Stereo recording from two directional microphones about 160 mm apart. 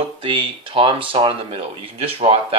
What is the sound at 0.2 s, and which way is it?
Speech, 30° right (ahead or behind).